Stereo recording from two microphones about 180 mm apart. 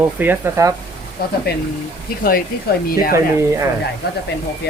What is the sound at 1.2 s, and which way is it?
Speech, 60° left (ahead or behind).